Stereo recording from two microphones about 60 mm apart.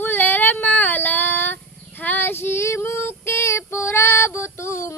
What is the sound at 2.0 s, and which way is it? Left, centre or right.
Female singing, left.